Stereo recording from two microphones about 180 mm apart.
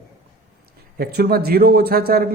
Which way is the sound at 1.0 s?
60° right (ahead or behind).